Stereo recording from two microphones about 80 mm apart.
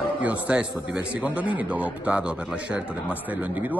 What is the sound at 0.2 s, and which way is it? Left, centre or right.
A man's voice, centre.